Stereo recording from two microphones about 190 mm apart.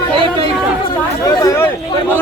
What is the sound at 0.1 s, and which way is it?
Chatter, 25° right (ahead or behind).